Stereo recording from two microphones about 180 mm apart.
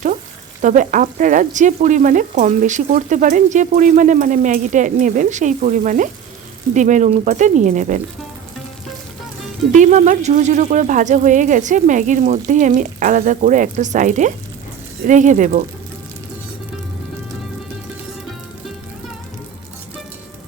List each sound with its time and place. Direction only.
0.6 s speech: 45° right (ahead or behind)
9.7 s speech: 45° right (ahead or behind)